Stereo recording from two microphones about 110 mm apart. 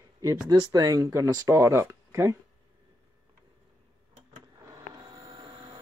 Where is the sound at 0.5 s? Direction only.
35° right (ahead or behind).